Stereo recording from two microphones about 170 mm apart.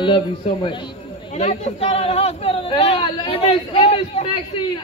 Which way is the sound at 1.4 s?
40° left (ahead or behind).